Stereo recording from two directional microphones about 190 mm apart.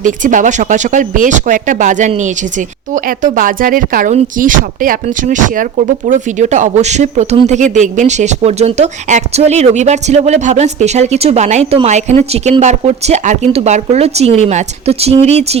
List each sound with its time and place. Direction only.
0.0 s speech: 40° right (ahead or behind)